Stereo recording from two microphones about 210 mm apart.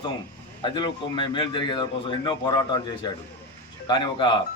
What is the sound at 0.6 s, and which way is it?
A man's voice, 20° left (ahead or behind).